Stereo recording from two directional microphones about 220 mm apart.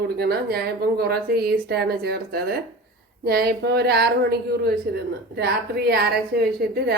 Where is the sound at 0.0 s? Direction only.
45° right (ahead or behind).